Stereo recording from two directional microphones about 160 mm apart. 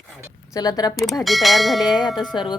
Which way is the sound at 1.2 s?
Centre (ahead or behind).